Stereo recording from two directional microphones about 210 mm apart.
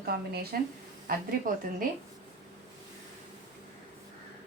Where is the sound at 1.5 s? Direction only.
40° right (ahead or behind).